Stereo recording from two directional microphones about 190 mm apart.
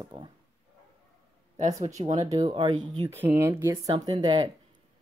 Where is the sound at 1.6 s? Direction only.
40° right (ahead or behind).